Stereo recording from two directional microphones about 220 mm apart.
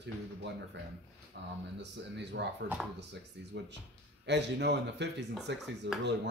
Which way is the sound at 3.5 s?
50° right (ahead or behind).